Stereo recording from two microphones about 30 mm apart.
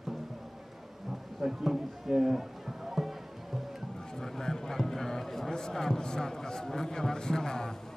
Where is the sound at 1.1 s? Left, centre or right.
Centre.